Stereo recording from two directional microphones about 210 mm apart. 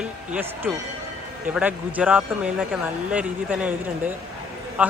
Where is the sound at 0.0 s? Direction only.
5° right (ahead or behind).